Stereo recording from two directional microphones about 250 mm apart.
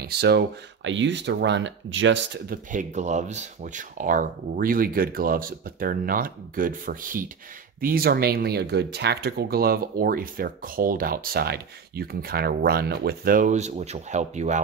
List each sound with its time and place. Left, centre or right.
0.0 s speech: right